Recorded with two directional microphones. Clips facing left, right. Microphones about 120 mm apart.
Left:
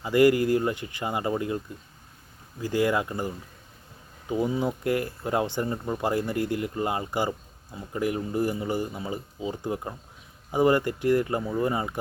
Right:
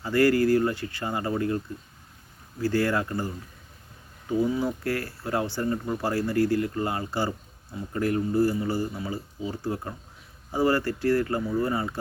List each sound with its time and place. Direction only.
0.0 s speech: 15° left (ahead or behind)